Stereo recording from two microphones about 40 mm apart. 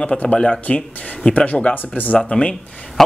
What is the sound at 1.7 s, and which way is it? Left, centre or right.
Speech, left.